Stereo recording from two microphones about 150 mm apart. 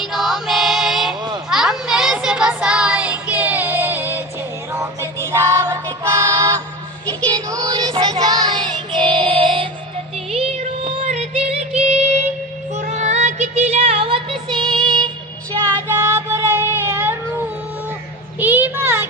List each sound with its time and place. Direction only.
0.0 s mantra: centre (ahead or behind)
1.5 s child singing: 5° right (ahead or behind)
4.8 s music: 20° right (ahead or behind)
7.3 s child singing: 30° right (ahead or behind)
10.3 s music: 45° right (ahead or behind)
15.9 s child singing: 20° right (ahead or behind)
18.3 s a sound: 10° right (ahead or behind)